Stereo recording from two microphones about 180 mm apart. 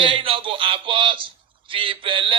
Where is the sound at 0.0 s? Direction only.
30° right (ahead or behind).